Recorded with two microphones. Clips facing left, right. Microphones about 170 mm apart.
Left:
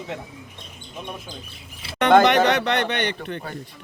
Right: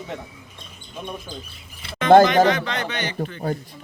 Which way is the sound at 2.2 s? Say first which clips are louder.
Right 1 dB; 70° left (ahead or behind).